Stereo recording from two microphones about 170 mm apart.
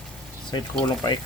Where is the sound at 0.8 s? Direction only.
25° left (ahead or behind).